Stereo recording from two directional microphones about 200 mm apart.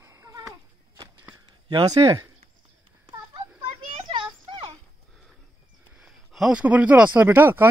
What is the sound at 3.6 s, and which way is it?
Children playing, 25° right (ahead or behind).